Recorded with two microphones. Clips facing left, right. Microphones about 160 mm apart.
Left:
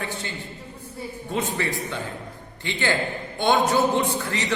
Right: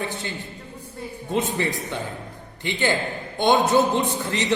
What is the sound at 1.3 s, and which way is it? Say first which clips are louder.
A man's voice: right 2 dB; 20° right (ahead or behind).